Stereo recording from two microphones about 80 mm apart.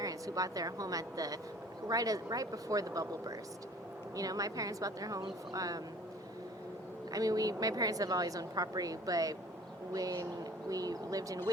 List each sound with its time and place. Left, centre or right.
0.0 s a woman's voice: right
7.1 s a woman's voice: right